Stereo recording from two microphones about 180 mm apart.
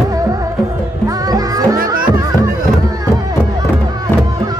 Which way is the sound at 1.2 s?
20° right (ahead or behind).